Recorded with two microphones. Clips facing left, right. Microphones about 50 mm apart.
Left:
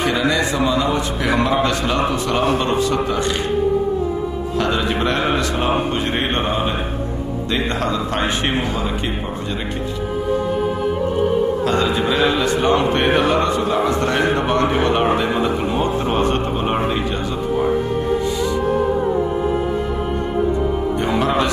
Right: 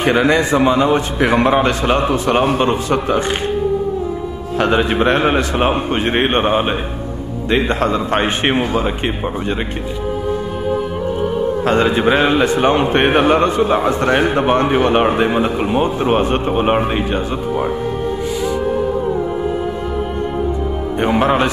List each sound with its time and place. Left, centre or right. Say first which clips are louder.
0.0 s a man's voice: right 4 dB; right
2.9 s a man's voice: right 3 dB; right
4.6 s a man's voice: right 5 dB; right
11.6 s a man's voice: right 4 dB; right
21.0 s a man's voice: right 6 dB; right